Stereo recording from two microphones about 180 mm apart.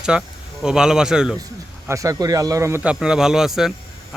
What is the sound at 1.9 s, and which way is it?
A man's voice, 20° right (ahead or behind).